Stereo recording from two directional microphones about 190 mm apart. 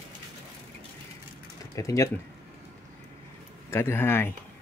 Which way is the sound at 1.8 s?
15° left (ahead or behind).